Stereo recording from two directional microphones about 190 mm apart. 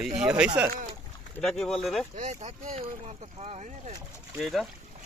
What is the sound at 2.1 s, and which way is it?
Speech, 40° right (ahead or behind).